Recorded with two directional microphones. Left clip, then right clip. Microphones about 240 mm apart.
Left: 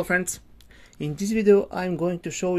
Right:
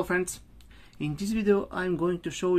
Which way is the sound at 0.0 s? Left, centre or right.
Centre.